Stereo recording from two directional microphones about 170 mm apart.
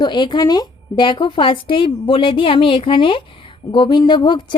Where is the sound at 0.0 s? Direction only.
25° left (ahead or behind).